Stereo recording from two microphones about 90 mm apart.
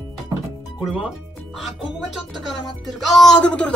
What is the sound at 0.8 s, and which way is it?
Speech, 10° right (ahead or behind).